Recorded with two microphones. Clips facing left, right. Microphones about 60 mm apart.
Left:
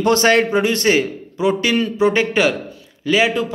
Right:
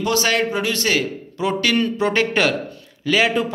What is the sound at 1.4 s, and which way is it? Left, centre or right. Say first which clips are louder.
A man's voice: left 2 dB; centre.